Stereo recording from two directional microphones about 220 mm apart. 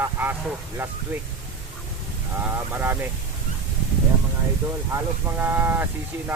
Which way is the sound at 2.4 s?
10° right (ahead or behind).